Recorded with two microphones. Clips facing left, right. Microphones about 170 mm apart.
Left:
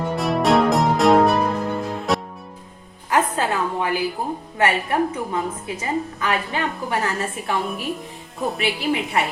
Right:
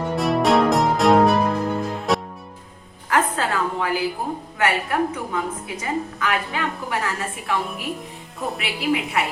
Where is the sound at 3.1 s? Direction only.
20° left (ahead or behind).